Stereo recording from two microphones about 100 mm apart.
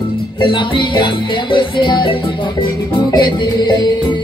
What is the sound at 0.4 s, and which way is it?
Music, 55° left (ahead or behind).